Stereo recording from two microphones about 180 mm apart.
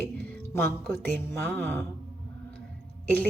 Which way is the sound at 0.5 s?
10° left (ahead or behind).